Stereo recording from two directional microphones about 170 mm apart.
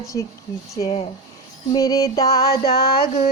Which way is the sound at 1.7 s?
20° left (ahead or behind).